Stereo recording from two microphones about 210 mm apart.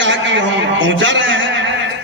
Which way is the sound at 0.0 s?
60° right (ahead or behind).